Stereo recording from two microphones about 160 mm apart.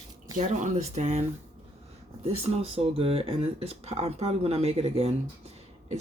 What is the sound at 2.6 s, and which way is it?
Speech, 40° right (ahead or behind).